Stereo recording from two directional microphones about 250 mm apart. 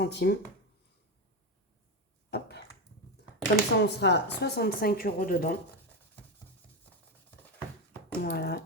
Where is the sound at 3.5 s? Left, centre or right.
Left.